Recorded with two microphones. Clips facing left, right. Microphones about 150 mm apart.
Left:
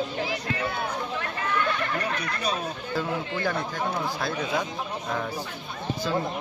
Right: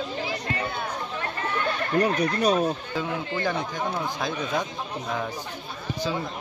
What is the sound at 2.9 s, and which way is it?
Speech, 15° right (ahead or behind).